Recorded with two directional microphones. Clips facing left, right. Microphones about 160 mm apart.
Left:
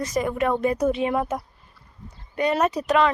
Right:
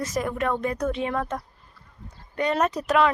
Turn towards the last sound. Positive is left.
turn(degrees=-5)  # may be behind; listen again after turning